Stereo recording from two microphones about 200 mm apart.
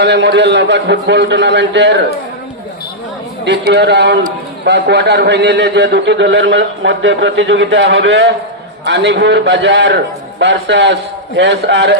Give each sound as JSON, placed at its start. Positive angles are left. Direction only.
{"t": 0.0, "sound": "a man's voice", "side_deg": -60}
{"t": 3.4, "sound": "a man's voice", "side_deg": -60}